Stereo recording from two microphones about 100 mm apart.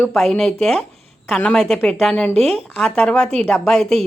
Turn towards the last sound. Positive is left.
turn(degrees=5)  # may be behind; listen again after turning